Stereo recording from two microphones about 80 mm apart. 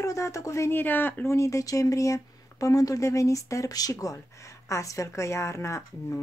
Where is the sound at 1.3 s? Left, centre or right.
Left.